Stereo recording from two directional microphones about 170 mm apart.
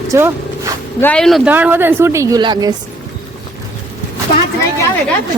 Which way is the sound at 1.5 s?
10° right (ahead or behind).